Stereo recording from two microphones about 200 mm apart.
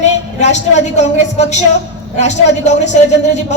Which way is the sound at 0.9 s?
35° left (ahead or behind).